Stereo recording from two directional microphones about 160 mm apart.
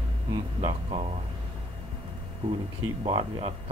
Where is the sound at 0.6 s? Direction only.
35° right (ahead or behind).